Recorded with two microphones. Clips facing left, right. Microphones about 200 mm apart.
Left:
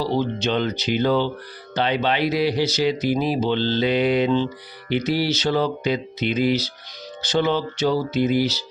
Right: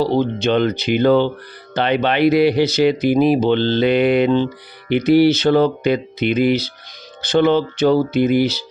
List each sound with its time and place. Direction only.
0.0 s speech: 55° right (ahead or behind)